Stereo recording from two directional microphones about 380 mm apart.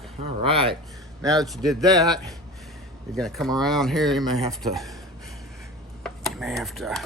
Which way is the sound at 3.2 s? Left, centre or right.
Centre.